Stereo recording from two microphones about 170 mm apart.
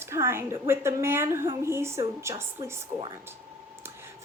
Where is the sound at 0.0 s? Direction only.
15° right (ahead or behind).